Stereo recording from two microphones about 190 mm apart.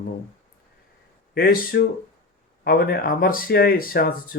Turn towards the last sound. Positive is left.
turn(degrees=50)  # may be behind; listen again after turning